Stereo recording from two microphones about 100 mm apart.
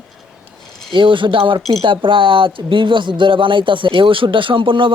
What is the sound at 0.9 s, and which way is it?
Speech, 55° right (ahead or behind).